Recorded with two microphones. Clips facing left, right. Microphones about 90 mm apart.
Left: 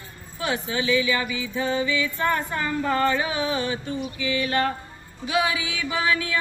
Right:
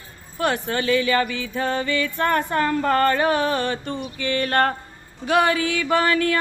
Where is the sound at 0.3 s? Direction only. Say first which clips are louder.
Right 4 dB; 60° right (ahead or behind).